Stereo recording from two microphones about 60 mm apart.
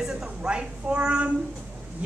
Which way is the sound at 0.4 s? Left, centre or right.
Centre.